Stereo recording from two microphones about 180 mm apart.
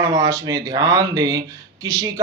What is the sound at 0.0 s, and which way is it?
Speech, 20° right (ahead or behind).